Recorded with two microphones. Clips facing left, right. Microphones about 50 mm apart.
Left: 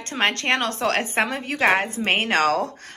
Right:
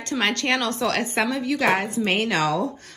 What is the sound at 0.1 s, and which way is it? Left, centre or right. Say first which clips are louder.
Speech: left 1 dB; left.